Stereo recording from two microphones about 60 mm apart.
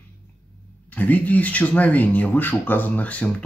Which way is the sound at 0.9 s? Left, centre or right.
Left.